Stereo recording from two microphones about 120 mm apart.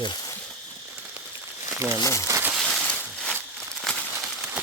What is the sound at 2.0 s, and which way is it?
Speech, 25° left (ahead or behind).